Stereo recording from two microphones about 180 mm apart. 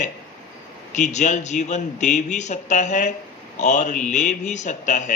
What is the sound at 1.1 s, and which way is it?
A man's voice, 40° left (ahead or behind).